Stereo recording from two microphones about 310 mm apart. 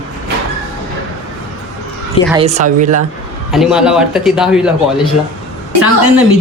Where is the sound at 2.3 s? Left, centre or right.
Centre.